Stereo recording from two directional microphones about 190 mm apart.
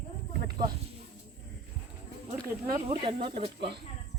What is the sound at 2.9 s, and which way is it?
Speech, 30° right (ahead or behind).